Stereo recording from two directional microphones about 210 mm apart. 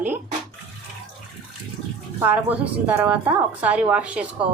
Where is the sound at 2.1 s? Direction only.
10° right (ahead or behind).